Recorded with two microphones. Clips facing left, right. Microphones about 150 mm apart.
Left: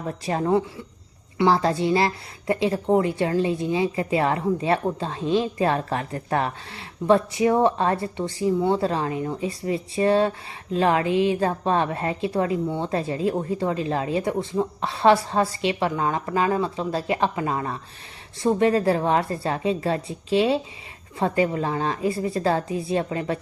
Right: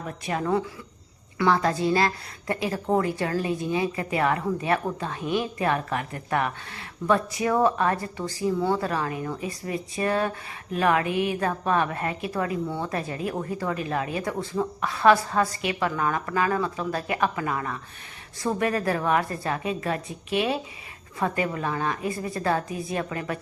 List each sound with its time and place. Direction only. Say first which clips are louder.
0.3 s a woman's voice: left 4 dB; 30° left (ahead or behind)